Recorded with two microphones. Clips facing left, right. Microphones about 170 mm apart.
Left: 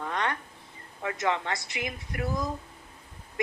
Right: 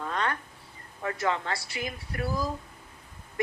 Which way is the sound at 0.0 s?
20° left (ahead or behind).